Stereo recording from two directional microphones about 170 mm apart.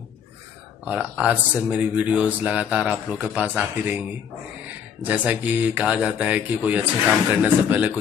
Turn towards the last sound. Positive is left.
turn(degrees=-10)  # may be behind; listen again after turning